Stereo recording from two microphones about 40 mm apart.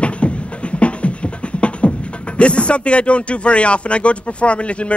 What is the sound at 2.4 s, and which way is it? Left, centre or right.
Speech, left.